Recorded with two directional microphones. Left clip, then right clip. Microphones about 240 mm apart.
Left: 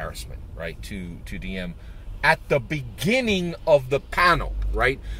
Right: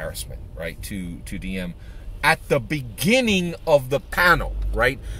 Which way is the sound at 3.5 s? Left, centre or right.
Centre.